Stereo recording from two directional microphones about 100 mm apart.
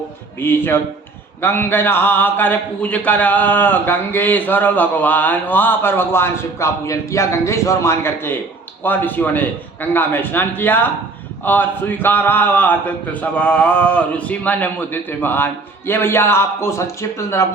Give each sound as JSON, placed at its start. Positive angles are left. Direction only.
{"t": 0.3, "sound": "a man's voice", "side_deg": 20}